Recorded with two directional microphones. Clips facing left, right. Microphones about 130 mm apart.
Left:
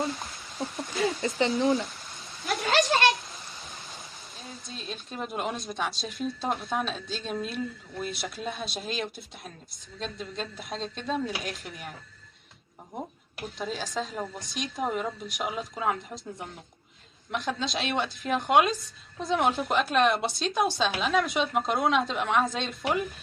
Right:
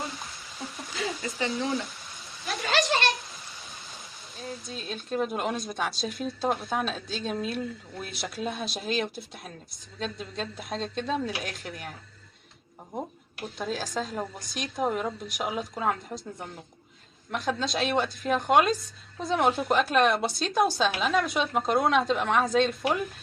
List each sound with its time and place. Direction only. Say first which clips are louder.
1.0 s speech: left 5 dB; 25° left (ahead or behind)
2.4 s a sound: left 2 dB; centre (ahead or behind)
4.4 s speech: right 5 dB; centre (ahead or behind)
13.4 s speech: right 1 dB; centre (ahead or behind)